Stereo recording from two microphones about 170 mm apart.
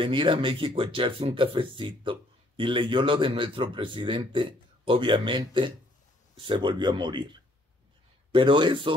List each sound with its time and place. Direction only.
0.0 s speech: 30° right (ahead or behind)